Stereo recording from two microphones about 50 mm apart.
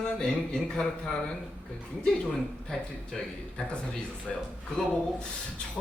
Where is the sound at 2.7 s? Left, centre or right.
Centre.